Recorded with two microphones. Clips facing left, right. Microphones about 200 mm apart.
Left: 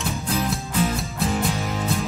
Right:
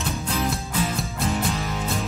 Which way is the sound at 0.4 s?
Centre (ahead or behind).